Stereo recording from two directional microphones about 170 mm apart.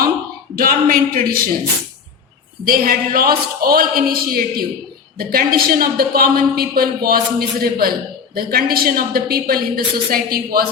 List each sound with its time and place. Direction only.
0.5 s a woman's voice: 60° right (ahead or behind)
2.6 s a woman's voice: 60° right (ahead or behind)